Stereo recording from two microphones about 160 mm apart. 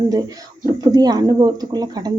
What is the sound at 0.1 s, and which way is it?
Speech, 25° right (ahead or behind).